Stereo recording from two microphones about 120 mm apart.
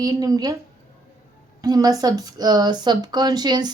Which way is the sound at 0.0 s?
30° right (ahead or behind).